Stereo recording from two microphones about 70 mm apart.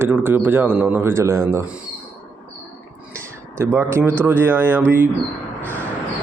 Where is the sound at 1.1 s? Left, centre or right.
Right.